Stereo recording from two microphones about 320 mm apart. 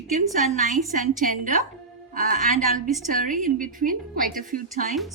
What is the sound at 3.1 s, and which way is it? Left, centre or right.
A woman's voice, right.